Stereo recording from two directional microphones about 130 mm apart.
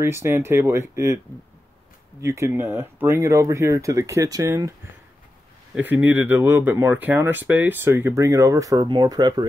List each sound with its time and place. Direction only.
0.0 s speech: 20° right (ahead or behind)
2.2 s speech: 20° right (ahead or behind)
5.8 s speech: 15° right (ahead or behind); by 9.5 s 30° right (ahead or behind)